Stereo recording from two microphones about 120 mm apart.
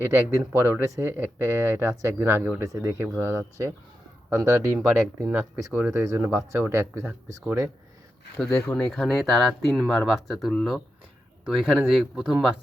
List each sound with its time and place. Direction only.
0.6 s speech: 25° right (ahead or behind)
2.7 s speech: 25° right (ahead or behind)
8.4 s speech: 25° left (ahead or behind)
8.7 s speech: 5° left (ahead or behind)